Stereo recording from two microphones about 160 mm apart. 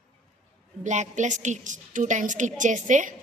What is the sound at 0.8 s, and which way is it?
A woman's voice, 50° right (ahead or behind).